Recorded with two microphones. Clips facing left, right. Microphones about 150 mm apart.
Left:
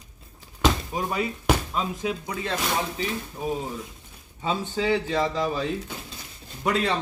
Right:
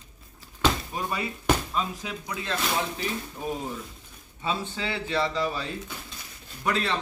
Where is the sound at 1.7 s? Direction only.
10° left (ahead or behind).